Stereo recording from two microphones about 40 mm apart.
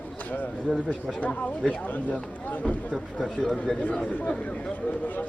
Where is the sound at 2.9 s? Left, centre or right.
Centre.